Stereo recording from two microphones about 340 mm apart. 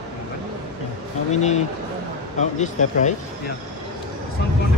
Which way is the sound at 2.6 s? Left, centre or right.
Left.